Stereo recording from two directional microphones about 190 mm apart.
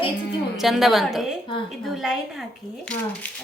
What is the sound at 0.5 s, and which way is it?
A woman's voice, centre (ahead or behind).